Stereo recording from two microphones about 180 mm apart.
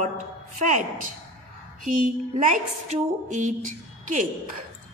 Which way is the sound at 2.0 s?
45° right (ahead or behind).